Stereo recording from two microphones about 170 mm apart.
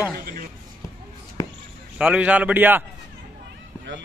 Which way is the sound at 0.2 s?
60° right (ahead or behind).